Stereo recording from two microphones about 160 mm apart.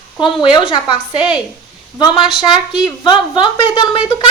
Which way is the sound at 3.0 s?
30° left (ahead or behind).